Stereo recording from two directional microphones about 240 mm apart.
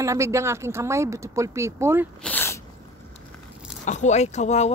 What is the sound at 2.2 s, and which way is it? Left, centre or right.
Sneeze, centre.